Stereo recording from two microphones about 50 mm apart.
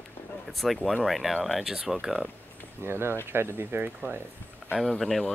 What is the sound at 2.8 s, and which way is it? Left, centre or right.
Speech, right.